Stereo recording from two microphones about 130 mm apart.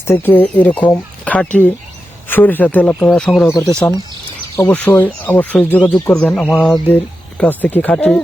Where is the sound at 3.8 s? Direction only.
15° left (ahead or behind).